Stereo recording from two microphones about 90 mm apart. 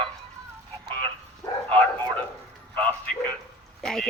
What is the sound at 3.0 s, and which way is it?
Bow-wow, 10° left (ahead or behind).